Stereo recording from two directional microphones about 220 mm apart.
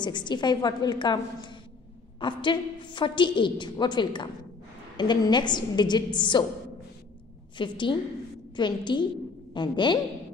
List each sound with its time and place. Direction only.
0.0 s a woman's voice: 20° left (ahead or behind)
7.5 s a woman's voice: 20° left (ahead or behind)